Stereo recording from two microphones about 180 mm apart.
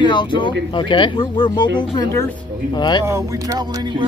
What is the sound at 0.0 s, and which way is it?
Speech, 25° left (ahead or behind).